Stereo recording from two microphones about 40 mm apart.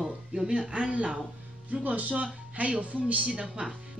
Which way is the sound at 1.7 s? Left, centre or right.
Right.